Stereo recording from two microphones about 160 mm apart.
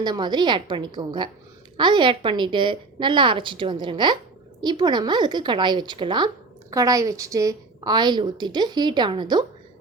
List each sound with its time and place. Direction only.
0.0 s a woman's voice: 25° right (ahead or behind)